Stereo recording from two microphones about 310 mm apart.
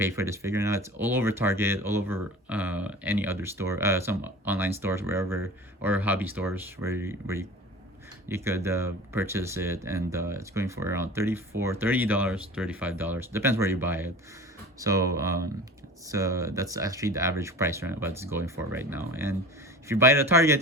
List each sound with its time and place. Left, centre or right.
0.0 s speech: centre